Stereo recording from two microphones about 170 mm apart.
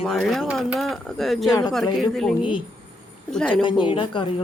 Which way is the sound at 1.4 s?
20° left (ahead or behind).